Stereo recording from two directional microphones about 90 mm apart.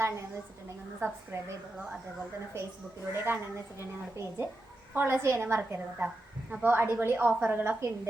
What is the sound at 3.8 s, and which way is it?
A woman's voice, 25° right (ahead or behind).